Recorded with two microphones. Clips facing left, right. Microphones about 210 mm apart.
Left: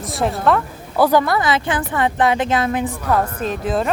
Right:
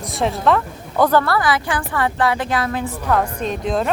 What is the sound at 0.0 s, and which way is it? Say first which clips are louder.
A woman's voice: even; centre (ahead or behind).